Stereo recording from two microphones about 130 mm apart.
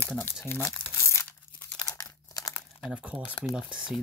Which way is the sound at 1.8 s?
30° left (ahead or behind).